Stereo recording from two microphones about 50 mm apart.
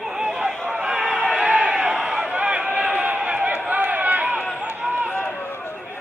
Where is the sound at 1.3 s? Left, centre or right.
Right.